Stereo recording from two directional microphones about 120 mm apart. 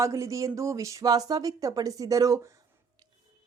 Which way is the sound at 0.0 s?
25° right (ahead or behind).